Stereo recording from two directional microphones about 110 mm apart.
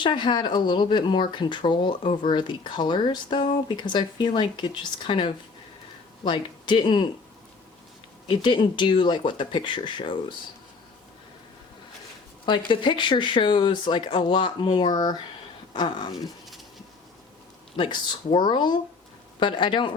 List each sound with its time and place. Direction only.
0.0 s speech: 45° left (ahead or behind)
8.3 s speech: 45° left (ahead or behind)
12.5 s speech: 45° left (ahead or behind)
17.7 s speech: 45° left (ahead or behind)